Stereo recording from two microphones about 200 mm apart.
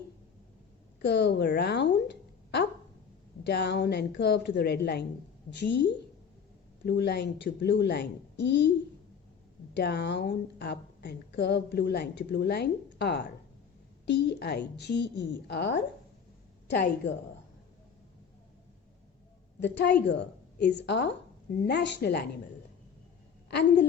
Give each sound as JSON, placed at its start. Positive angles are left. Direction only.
{"t": 1.0, "sound": "a woman's voice", "side_deg": 60}
{"t": 9.7, "sound": "a woman's voice", "side_deg": 55}
{"t": 19.6, "sound": "a woman's voice", "side_deg": 60}
{"t": 23.5, "sound": "a woman's voice", "side_deg": 55}